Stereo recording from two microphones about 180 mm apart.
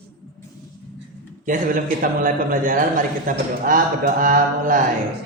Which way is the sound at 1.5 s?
45° right (ahead or behind).